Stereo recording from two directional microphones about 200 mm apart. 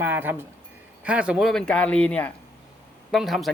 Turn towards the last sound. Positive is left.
turn(degrees=0)  # may be behind; listen again after turning